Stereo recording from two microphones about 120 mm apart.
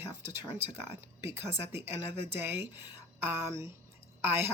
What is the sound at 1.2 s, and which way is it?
A woman's voice, 20° right (ahead or behind).